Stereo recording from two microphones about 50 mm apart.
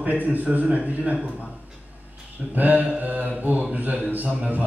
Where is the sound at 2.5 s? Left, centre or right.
Right.